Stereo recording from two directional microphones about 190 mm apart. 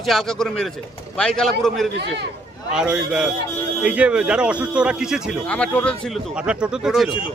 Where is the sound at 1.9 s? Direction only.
60° right (ahead or behind).